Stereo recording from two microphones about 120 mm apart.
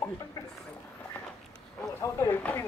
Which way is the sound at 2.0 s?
20° left (ahead or behind).